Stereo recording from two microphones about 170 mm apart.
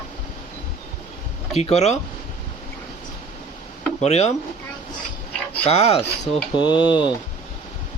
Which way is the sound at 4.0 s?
40° left (ahead or behind).